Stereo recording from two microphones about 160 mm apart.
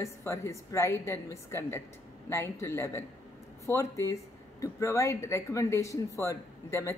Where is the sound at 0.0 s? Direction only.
20° left (ahead or behind).